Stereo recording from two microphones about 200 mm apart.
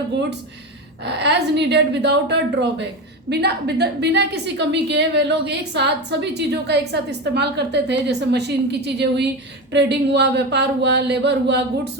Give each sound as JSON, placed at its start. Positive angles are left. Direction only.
{"t": 1.0, "sound": "a woman's voice", "side_deg": -60}